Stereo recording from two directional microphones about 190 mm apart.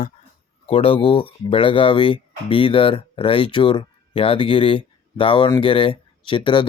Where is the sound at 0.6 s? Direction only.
30° left (ahead or behind).